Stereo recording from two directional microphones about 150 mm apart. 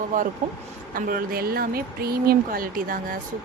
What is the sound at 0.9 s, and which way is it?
Speech, 70° right (ahead or behind).